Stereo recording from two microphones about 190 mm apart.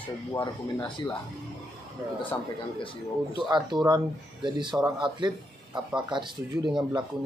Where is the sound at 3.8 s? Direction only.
25° right (ahead or behind).